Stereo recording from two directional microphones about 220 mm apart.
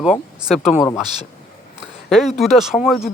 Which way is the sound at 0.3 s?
Centre (ahead or behind).